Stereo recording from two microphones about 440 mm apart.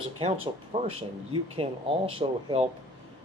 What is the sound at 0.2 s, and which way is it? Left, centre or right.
Speech, centre.